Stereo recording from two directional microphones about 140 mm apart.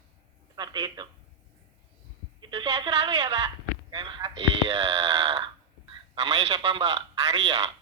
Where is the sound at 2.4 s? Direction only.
35° right (ahead or behind).